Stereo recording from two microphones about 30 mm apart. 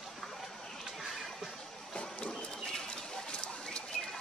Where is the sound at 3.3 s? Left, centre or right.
Left.